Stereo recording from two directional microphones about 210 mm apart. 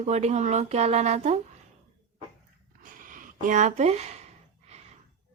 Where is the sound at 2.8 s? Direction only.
40° right (ahead or behind).